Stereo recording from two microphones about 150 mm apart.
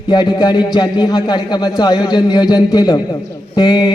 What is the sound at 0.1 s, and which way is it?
A man's voice, 30° left (ahead or behind).